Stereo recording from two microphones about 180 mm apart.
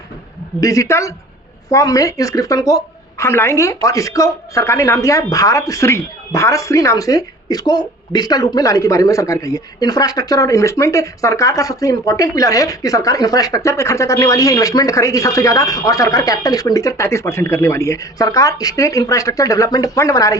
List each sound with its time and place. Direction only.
0.6 s a woman's voice: 20° left (ahead or behind)